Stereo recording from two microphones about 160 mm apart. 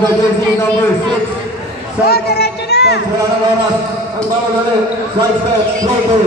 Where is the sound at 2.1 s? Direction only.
75° left (ahead or behind).